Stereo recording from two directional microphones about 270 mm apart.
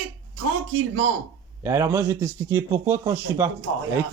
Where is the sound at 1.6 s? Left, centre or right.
Centre.